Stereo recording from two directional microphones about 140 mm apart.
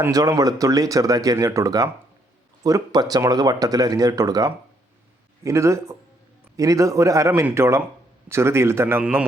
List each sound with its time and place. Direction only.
0.0 s speech: 25° right (ahead or behind)